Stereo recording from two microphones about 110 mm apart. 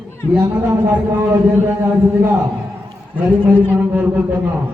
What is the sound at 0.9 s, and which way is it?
A man's voice, 20° right (ahead or behind).